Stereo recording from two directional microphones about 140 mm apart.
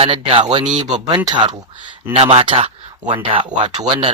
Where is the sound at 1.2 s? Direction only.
35° right (ahead or behind).